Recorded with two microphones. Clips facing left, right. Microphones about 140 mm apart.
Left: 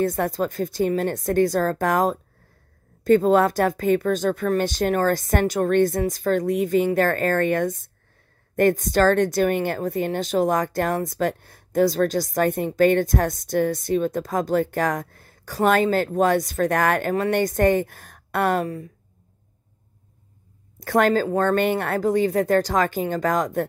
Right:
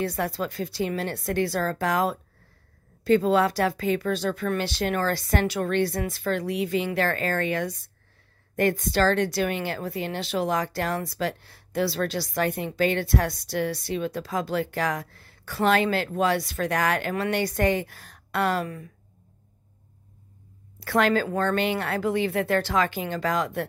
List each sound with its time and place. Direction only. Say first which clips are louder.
0.0 s a woman's voice: left 5 dB; 45° left (ahead or behind)
20.8 s a woman's voice: left 3 dB; 45° left (ahead or behind)